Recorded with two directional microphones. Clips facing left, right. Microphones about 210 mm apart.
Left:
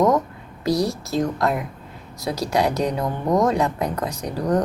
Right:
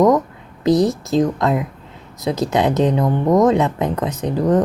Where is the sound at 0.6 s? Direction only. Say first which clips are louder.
Right 6 dB; 20° right (ahead or behind).